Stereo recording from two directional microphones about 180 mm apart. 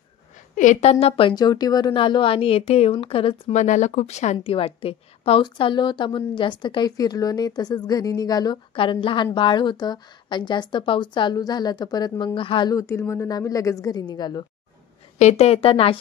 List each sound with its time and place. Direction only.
0.6 s a woman's voice: 40° left (ahead or behind)
3.6 s a woman's voice: 40° left (ahead or behind); by 14.4 s 25° left (ahead or behind)
15.1 s a woman's voice: 40° left (ahead or behind)